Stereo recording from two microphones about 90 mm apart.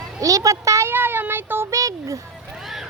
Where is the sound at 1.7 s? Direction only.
40° right (ahead or behind).